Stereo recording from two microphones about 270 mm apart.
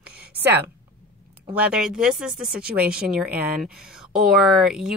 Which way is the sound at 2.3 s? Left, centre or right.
Right.